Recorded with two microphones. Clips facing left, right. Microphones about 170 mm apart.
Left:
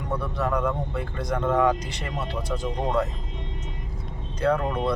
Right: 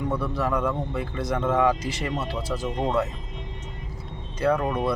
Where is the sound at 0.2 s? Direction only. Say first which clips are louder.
Right 1 dB; 5° right (ahead or behind).